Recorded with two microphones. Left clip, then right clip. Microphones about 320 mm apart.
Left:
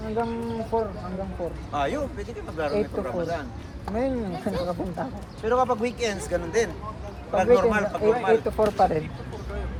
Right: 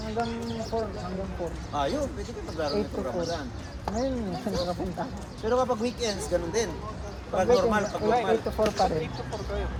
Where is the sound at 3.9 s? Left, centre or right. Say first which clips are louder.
Left 2 dB; right.